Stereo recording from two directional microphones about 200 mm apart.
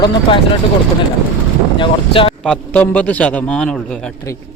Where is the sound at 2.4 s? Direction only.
10° left (ahead or behind).